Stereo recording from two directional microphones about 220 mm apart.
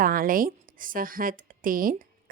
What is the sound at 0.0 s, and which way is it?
A woman's voice, 40° right (ahead or behind).